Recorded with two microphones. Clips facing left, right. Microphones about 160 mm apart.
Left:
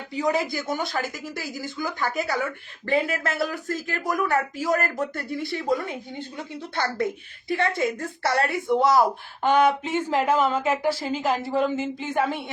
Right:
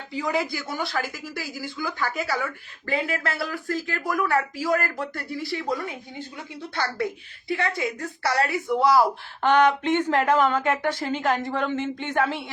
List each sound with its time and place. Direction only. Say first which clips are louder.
0.2 s a woman's voice: left 2 dB; 20° left (ahead or behind)
2.0 s speech: left 2 dB; 45° left (ahead or behind)
2.8 s a woman's voice: left 3 dB; 25° left (ahead or behind)
9.4 s speech: even; 10° left (ahead or behind)